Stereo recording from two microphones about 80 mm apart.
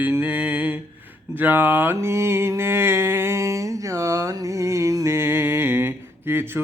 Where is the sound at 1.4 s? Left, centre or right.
Right.